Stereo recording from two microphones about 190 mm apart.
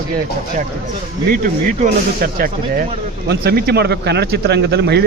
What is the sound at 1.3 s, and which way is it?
A man's voice, 50° right (ahead or behind).